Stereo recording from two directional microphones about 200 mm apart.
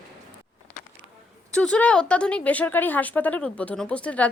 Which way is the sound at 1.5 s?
5° left (ahead or behind).